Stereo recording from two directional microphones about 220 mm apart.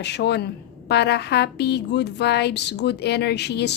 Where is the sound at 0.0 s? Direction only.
50° left (ahead or behind).